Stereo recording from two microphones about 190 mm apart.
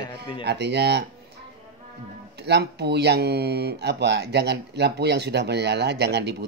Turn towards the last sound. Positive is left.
turn(degrees=-60)  # may be behind; listen again after turning